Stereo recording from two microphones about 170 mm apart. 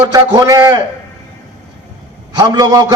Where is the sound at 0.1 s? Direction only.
20° right (ahead or behind).